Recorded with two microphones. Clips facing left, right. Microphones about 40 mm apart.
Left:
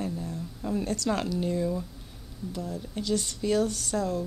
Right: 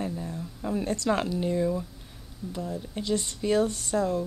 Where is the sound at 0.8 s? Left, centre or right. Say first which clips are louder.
Right 4 dB; right.